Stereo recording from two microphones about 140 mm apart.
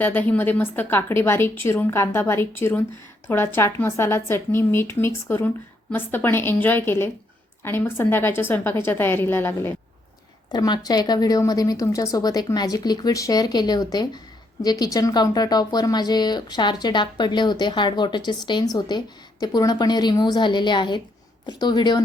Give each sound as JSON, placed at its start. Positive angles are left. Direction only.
{"t": 0.0, "sound": "a woman's voice", "side_deg": 15}
{"t": 10.5, "sound": "a woman's voice", "side_deg": 30}